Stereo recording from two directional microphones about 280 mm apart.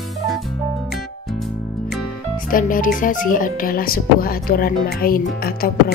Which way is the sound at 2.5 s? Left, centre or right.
Left.